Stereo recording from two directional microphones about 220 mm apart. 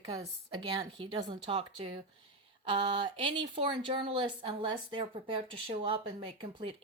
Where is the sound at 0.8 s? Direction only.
20° right (ahead or behind).